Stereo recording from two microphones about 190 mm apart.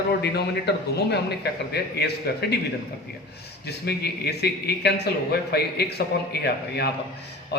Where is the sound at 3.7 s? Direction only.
60° left (ahead or behind).